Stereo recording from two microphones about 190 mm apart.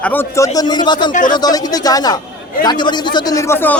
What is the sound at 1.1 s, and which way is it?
Speech, 45° left (ahead or behind).